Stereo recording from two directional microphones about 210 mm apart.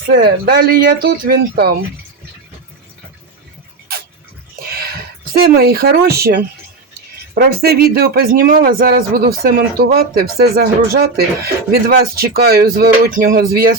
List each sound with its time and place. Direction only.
0.1 s speech: 45° right (ahead or behind)
4.7 s a sound: 45° right (ahead or behind)
7.3 s speech: 50° right (ahead or behind)